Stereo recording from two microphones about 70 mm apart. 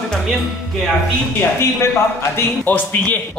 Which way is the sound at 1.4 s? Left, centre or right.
Left.